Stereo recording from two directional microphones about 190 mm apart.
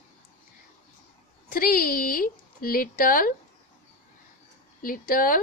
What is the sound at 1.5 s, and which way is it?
A woman's voice, 50° left (ahead or behind).